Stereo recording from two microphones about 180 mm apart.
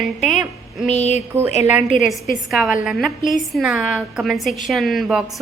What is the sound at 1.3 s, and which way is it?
Speech, 35° right (ahead or behind).